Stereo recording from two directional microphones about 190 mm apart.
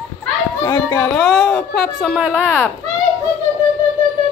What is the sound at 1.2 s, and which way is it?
Speech, centre (ahead or behind).